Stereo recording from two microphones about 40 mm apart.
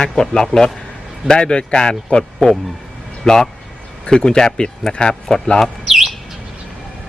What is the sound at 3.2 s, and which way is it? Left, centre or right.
A man's voice, centre.